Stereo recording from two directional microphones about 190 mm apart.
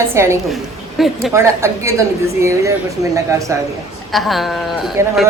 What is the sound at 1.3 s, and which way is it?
A woman's voice, 15° right (ahead or behind).